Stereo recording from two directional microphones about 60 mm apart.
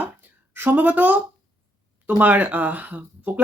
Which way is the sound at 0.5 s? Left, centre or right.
Right.